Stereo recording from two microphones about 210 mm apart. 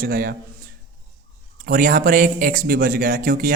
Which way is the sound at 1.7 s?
40° right (ahead or behind).